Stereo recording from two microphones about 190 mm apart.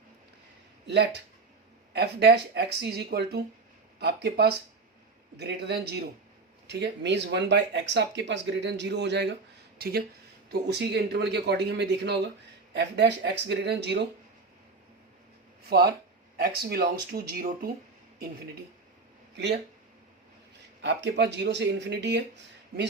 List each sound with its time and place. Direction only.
0.9 s speech: 60° right (ahead or behind)
15.7 s speech: 55° right (ahead or behind)
20.8 s speech: 65° right (ahead or behind)